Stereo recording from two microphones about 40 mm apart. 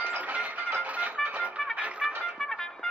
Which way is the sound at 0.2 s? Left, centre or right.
Right.